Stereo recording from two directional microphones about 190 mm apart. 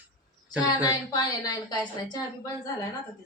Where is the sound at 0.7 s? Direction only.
20° left (ahead or behind).